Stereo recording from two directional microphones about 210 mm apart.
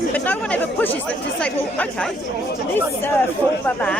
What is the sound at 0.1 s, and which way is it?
Speech, 10° left (ahead or behind).